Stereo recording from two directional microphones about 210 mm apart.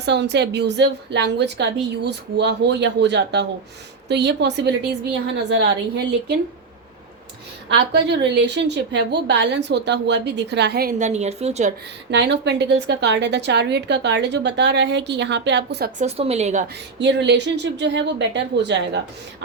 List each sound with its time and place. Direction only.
0.0 s a woman's voice: 55° right (ahead or behind)
7.7 s a woman's voice: 55° right (ahead or behind)
10.9 s a woman's voice: 35° right (ahead or behind)
12.1 s a woman's voice: 55° right (ahead or behind)
16.0 s a woman's voice: 30° right (ahead or behind)
17.0 s a woman's voice: 55° right (ahead or behind)